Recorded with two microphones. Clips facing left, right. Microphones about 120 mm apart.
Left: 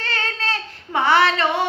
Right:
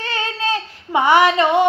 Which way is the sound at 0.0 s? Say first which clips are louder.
Right 3 dB; 15° right (ahead or behind).